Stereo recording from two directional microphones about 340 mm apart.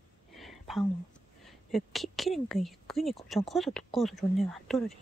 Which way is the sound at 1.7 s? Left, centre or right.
Centre.